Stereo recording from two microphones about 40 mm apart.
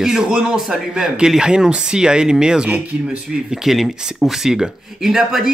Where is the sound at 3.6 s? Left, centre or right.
Centre.